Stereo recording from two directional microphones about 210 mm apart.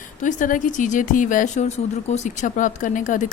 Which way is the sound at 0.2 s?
40° left (ahead or behind).